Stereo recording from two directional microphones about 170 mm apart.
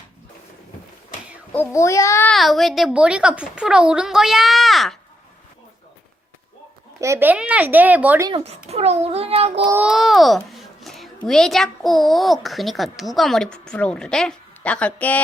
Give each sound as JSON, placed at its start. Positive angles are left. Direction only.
{"t": 1.5, "sound": "a child's voice", "side_deg": 15}
{"t": 2.3, "sound": "a child's voice", "side_deg": 0}
{"t": 7.0, "sound": "speech", "side_deg": -15}
{"t": 8.3, "sound": "a child's voice", "side_deg": -35}
{"t": 9.6, "sound": "a child's voice", "side_deg": -10}